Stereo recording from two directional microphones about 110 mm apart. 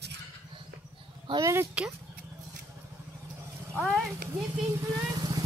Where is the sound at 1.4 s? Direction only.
25° right (ahead or behind).